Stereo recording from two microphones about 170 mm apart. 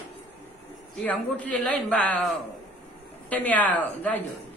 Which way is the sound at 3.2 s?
10° left (ahead or behind).